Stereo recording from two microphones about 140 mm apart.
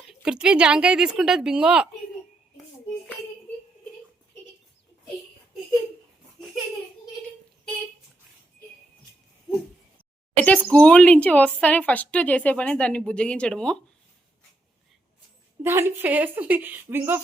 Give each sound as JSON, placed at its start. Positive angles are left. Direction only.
{"t": 0.1, "sound": "speech", "side_deg": -5}
{"t": 10.3, "sound": "speech", "side_deg": 10}
{"t": 15.6, "sound": "speech", "side_deg": -15}